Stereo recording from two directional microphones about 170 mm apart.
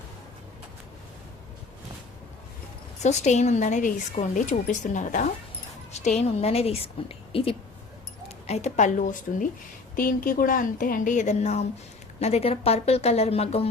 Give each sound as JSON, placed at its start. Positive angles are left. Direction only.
{"t": 3.0, "sound": "a woman's voice", "side_deg": 45}
{"t": 8.4, "sound": "a woman's voice", "side_deg": 40}